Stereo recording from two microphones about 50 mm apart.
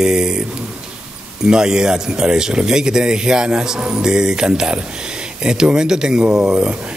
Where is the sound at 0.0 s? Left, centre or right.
Centre.